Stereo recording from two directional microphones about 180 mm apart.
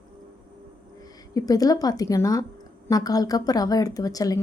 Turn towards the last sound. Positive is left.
turn(degrees=20)  # may be behind; listen again after turning